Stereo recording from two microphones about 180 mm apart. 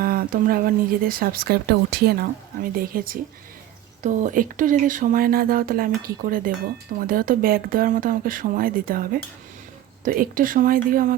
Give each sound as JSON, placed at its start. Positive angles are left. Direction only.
{"t": 0.0, "sound": "speech", "side_deg": -55}